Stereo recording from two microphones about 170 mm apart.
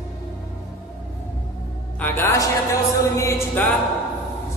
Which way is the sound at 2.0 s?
15° left (ahead or behind).